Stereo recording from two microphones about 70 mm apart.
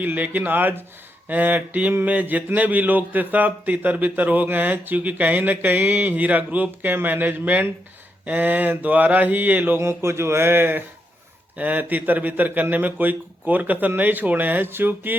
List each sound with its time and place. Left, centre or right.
0.0 s mantra: right
9.7 s speech: right
11.5 s mantra: right